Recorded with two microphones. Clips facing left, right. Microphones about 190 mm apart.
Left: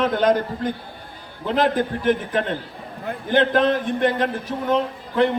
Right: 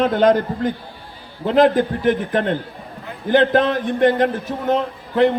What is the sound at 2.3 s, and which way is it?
A man's voice, 50° right (ahead or behind).